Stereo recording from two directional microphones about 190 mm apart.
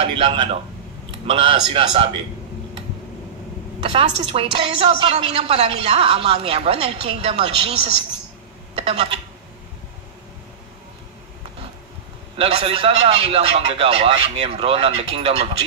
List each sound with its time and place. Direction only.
0.0 s speech: 30° right (ahead or behind)
3.9 s a woman's voice: 30° right (ahead or behind)
8.7 s speech: 30° right (ahead or behind)
12.4 s a woman's voice: 30° right (ahead or behind)